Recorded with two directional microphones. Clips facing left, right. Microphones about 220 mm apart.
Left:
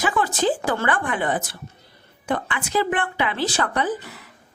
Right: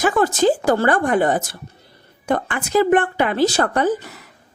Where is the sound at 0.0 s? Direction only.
45° right (ahead or behind).